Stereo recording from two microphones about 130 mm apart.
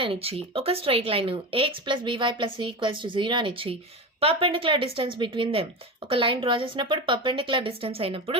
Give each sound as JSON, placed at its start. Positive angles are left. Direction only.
{"t": 0.0, "sound": "speech", "side_deg": -45}